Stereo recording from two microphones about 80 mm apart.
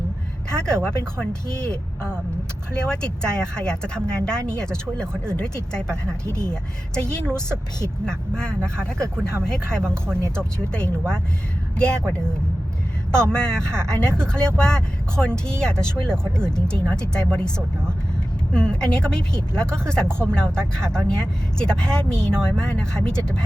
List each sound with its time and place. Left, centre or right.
0.5 s speech: centre
2.7 s speech: centre
6.2 s speech: right
6.5 s speech: centre
13.1 s speech: centre
18.5 s speech: centre